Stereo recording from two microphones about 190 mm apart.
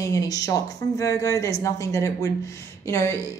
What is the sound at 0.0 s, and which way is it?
A woman's voice, 20° left (ahead or behind).